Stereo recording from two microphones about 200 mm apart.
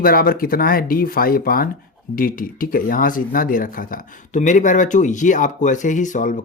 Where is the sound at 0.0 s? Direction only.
45° left (ahead or behind).